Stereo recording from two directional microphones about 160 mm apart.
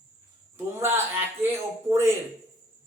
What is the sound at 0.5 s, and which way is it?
Speech, 15° right (ahead or behind).